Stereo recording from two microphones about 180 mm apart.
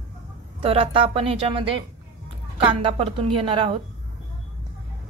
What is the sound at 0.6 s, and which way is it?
A woman's voice, 30° right (ahead or behind).